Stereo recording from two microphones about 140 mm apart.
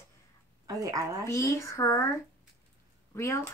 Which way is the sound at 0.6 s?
25° right (ahead or behind).